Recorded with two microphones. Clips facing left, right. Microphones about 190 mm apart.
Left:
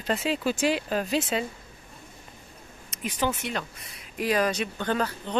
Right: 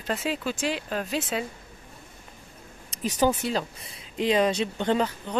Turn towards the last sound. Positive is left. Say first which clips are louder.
# right 3 dB
turn(degrees=-20)  # may be behind; listen again after turning